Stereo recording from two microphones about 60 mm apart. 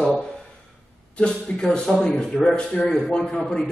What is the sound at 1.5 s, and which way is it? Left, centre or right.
Speech, centre.